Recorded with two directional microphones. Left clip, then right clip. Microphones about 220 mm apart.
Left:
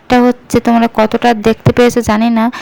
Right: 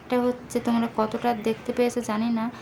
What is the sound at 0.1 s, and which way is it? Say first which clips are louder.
Speech: left 15 dB; 40° left (ahead or behind).